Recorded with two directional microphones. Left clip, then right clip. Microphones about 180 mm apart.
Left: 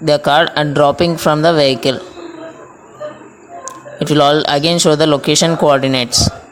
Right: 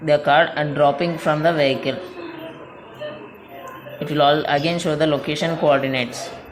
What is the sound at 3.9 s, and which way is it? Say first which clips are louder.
A man's voice: left 6 dB; 50° left (ahead or behind).